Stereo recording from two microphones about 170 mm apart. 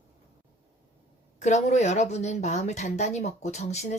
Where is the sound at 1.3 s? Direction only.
40° left (ahead or behind).